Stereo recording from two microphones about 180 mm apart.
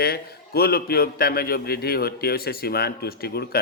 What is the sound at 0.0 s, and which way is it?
A man's voice, 60° left (ahead or behind).